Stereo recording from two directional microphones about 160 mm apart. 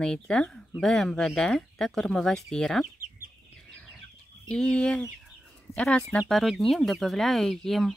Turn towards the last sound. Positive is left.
turn(degrees=0)  # may be behind; listen again after turning